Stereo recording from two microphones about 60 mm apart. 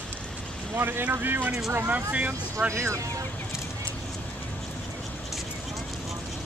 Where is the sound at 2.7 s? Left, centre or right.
Right.